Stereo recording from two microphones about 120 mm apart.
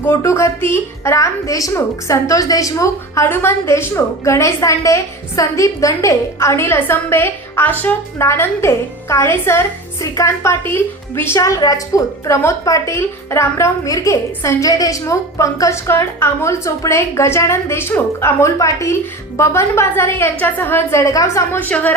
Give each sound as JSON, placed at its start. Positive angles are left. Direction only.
{"t": 0.0, "sound": "a woman's voice", "side_deg": 25}
{"t": 21.6, "sound": "speech", "side_deg": 15}